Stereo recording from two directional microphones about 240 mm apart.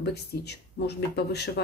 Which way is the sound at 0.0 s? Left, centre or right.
Left.